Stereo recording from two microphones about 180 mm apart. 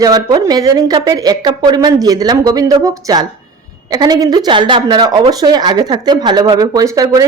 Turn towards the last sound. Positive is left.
turn(degrees=-20)  # may be behind; listen again after turning